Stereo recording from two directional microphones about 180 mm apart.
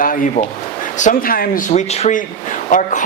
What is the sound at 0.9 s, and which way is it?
Speech, 50° left (ahead or behind).